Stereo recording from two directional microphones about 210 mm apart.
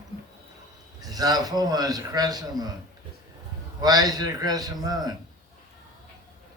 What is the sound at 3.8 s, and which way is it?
A man's voice, 20° right (ahead or behind).